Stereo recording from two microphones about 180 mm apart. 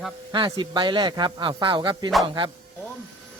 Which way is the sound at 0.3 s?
25° right (ahead or behind).